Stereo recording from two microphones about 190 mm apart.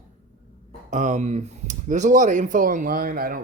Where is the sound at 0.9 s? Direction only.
40° right (ahead or behind).